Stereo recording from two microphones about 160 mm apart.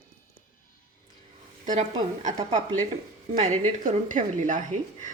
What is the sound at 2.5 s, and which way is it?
A woman's voice, 50° right (ahead or behind).